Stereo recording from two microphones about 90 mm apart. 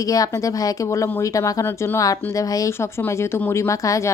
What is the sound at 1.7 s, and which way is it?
A woman's voice, 25° left (ahead or behind).